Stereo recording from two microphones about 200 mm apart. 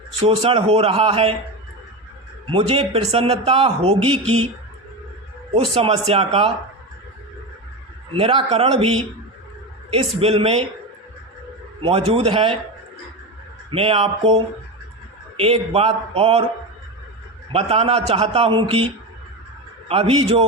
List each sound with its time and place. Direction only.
0.2 s a man's voice: 25° right (ahead or behind)
2.5 s a man's voice: 25° right (ahead or behind)
5.5 s a man's voice: 30° right (ahead or behind)
8.1 s a man's voice: 25° right (ahead or behind)
11.8 s a man's voice: 30° right (ahead or behind)
13.7 s a man's voice: 30° right (ahead or behind)
17.5 s a man's voice: 30° right (ahead or behind)
19.9 s a man's voice: 30° right (ahead or behind)